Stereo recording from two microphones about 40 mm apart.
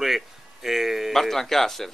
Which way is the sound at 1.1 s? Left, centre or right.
Centre.